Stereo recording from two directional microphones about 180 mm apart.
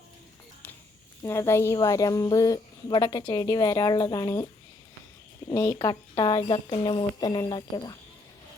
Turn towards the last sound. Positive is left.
turn(degrees=25)  # may be behind; listen again after turning